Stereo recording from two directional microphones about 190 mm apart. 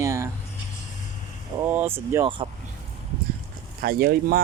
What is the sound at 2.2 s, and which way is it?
Speech, 25° right (ahead or behind).